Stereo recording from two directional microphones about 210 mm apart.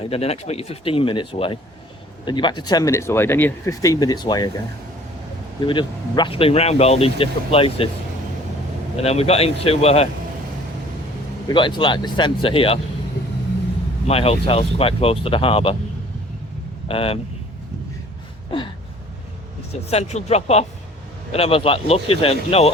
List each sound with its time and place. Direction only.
0.0 s speech: 30° left (ahead or behind)
5.6 s speech: 20° left (ahead or behind)
9.0 s speech: 30° left (ahead or behind)
11.4 s speech: 25° left (ahead or behind)
14.1 s speech: 30° left (ahead or behind)
16.9 s speech: 25° left (ahead or behind)
19.9 s speech: 30° left (ahead or behind)